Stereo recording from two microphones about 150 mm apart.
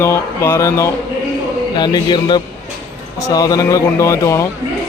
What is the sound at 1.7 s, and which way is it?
A man's voice, 30° left (ahead or behind).